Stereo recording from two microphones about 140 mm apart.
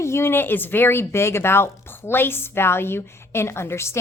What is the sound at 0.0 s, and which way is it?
A woman's voice, 20° left (ahead or behind).